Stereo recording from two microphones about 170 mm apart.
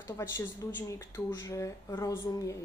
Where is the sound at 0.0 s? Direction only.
15° left (ahead or behind).